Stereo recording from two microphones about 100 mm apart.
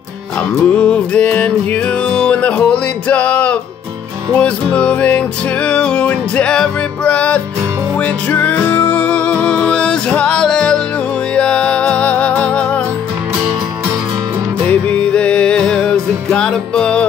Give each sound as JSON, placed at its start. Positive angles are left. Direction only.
{"t": 0.7, "sound": "music", "side_deg": 15}
{"t": 14.7, "sound": "music", "side_deg": 15}